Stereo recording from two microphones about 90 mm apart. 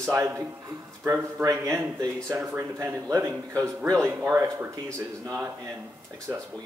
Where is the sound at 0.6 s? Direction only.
30° right (ahead or behind).